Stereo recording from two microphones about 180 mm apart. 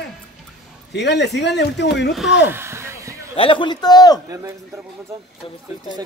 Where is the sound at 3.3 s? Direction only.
30° left (ahead or behind).